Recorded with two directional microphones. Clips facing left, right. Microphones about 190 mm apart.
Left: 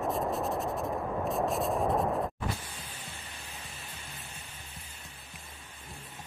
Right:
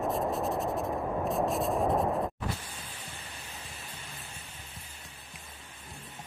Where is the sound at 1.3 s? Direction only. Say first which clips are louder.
Even; centre (ahead or behind).